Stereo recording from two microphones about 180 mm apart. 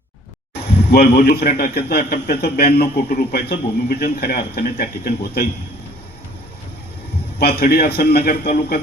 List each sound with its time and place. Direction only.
0.9 s a man's voice: 65° left (ahead or behind)
7.3 s a man's voice: 60° left (ahead or behind)